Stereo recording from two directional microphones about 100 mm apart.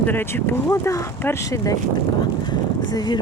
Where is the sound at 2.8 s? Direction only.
45° left (ahead or behind).